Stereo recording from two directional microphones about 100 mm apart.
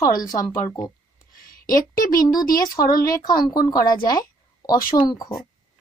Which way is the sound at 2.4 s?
40° left (ahead or behind).